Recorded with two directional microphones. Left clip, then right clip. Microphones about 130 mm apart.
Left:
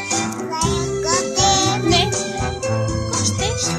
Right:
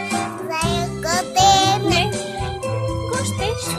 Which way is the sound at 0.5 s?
25° right (ahead or behind).